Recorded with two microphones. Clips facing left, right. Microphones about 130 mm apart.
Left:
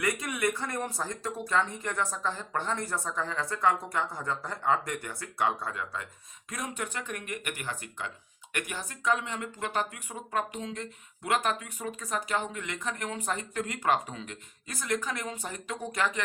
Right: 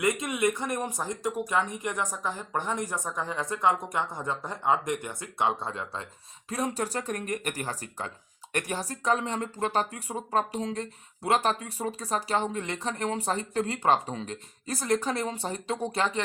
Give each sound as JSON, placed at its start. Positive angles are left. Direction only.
{"t": 0.0, "sound": "speech", "side_deg": -20}